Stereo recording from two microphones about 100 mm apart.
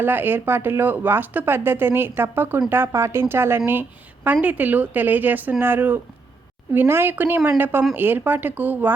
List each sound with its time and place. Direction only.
0.0 s a woman's voice: 20° right (ahead or behind)